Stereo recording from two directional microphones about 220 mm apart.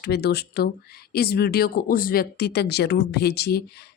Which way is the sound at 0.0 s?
45° left (ahead or behind).